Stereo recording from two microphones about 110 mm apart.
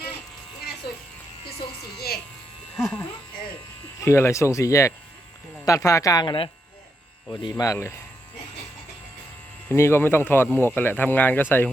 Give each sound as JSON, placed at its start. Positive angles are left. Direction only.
{"t": 2.7, "sound": "speech", "side_deg": 0}
{"t": 4.0, "sound": "speech", "side_deg": 25}
{"t": 7.5, "sound": "speech", "side_deg": 25}
{"t": 9.6, "sound": "speech", "side_deg": 25}